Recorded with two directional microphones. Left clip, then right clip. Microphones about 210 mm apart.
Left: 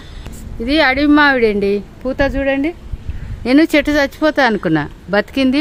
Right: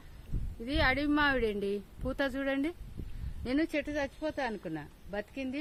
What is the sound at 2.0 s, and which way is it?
Speech, 20° right (ahead or behind).